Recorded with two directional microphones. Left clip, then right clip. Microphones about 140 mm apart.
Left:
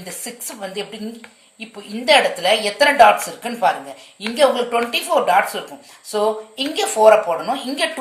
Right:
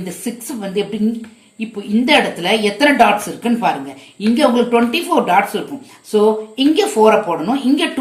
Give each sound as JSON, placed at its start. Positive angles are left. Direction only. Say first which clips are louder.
{"t": 0.0, "sound": "a woman's voice", "louder": "right 5 dB", "side_deg": 45}
{"t": 2.0, "sound": "a woman's voice", "louder": "left 1 dB", "side_deg": 45}